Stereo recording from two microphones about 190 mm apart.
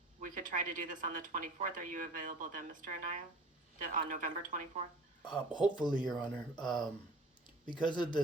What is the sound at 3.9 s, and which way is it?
Speech, 45° right (ahead or behind).